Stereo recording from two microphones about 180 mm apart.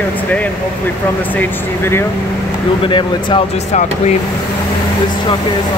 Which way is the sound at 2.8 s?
25° left (ahead or behind).